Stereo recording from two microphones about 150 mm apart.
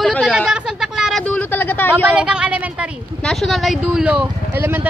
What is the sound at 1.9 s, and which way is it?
Speech, 5° right (ahead or behind).